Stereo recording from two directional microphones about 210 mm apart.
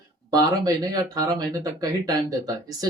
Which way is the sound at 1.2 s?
15° right (ahead or behind).